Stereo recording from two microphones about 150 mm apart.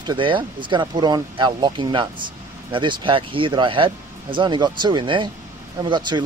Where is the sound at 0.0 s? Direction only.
30° right (ahead or behind).